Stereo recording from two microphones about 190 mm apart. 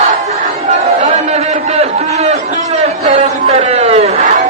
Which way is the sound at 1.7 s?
35° right (ahead or behind).